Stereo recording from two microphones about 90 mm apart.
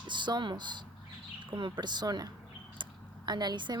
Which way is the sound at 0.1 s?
60° right (ahead or behind).